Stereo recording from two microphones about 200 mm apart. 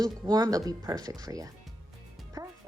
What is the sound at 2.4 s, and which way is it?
Music, 20° right (ahead or behind).